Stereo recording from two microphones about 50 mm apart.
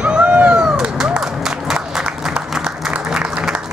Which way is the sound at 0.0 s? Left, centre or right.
Right.